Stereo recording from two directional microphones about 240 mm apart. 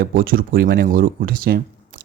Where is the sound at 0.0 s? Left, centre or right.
Right.